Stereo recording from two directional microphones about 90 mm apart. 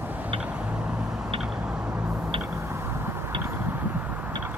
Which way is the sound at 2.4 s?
30° right (ahead or behind).